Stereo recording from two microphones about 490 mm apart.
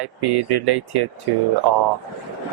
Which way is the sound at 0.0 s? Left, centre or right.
Right.